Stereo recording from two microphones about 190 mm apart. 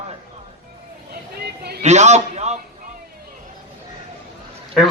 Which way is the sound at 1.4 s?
55° right (ahead or behind).